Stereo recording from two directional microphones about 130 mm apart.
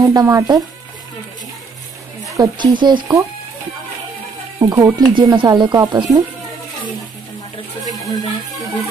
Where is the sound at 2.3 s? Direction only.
30° right (ahead or behind).